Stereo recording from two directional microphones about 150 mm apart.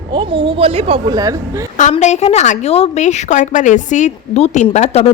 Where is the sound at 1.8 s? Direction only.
50° left (ahead or behind).